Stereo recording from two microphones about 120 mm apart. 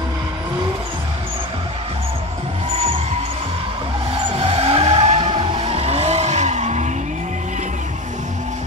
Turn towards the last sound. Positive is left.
turn(degrees=-75)  # may be behind; listen again after turning